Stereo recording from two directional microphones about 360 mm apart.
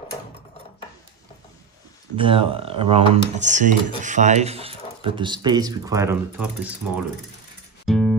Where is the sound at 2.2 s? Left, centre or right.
Centre.